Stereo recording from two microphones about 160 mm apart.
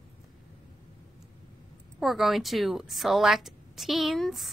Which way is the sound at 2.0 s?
Centre (ahead or behind).